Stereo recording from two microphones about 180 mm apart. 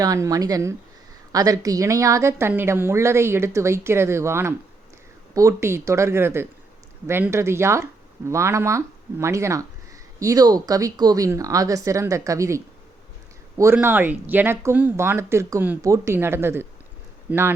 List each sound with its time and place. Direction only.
0.0 s speech: 20° right (ahead or behind)
13.7 s speech: 10° right (ahead or behind)